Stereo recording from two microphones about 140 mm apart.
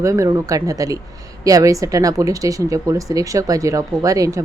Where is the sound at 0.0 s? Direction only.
20° right (ahead or behind).